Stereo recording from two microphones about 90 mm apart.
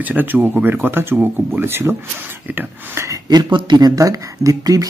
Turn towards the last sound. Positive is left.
turn(degrees=-40)  # may be behind; listen again after turning